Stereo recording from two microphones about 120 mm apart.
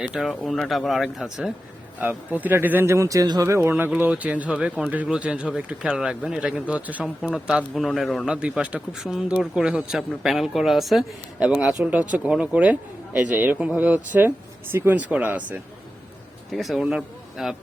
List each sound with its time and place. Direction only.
0.0 s a man's voice: 5° right (ahead or behind)
2.0 s a man's voice: 15° right (ahead or behind)
11.3 s speech: 10° right (ahead or behind)
16.5 s speech: centre (ahead or behind)